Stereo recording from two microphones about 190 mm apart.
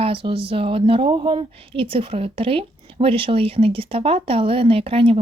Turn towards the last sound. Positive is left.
turn(degrees=-30)  # may be behind; listen again after turning